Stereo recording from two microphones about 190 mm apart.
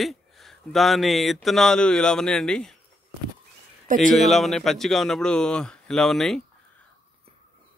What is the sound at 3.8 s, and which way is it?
Speech, 45° right (ahead or behind).